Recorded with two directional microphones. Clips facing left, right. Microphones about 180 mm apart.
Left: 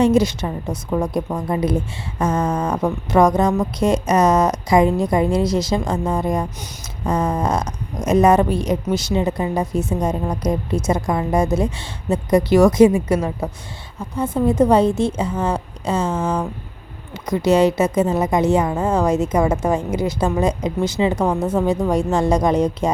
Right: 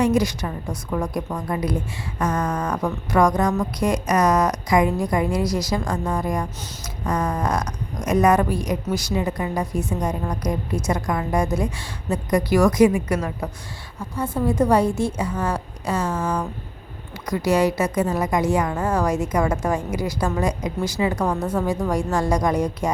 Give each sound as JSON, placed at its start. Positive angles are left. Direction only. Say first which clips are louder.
{"t": 0.0, "sound": "speech", "louder": "left 4 dB", "side_deg": 25}